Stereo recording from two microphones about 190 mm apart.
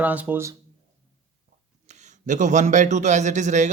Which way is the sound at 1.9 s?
40° right (ahead or behind).